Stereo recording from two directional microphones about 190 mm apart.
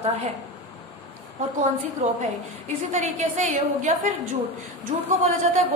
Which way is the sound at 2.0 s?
40° right (ahead or behind).